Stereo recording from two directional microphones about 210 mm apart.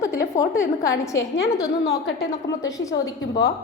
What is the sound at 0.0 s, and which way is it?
A woman's voice, 15° left (ahead or behind).